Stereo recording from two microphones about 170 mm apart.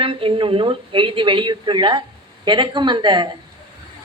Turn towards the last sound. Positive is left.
turn(degrees=-25)  # may be behind; listen again after turning